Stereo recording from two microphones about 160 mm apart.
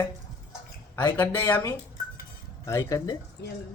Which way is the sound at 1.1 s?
10° left (ahead or behind).